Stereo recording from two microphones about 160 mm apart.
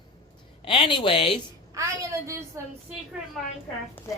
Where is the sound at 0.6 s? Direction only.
30° left (ahead or behind).